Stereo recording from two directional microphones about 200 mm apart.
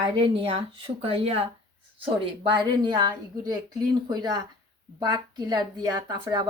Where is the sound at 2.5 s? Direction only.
20° right (ahead or behind).